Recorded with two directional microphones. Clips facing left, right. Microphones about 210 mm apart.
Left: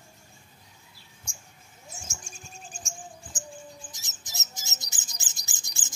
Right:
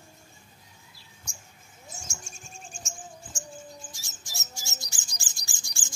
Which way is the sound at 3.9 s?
20° left (ahead or behind).